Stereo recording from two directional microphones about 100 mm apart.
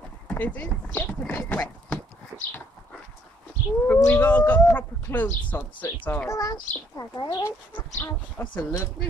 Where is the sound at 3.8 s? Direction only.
20° left (ahead or behind).